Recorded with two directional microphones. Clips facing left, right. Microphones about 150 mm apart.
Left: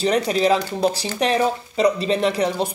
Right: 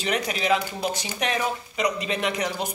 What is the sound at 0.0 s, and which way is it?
Speech, 35° left (ahead or behind).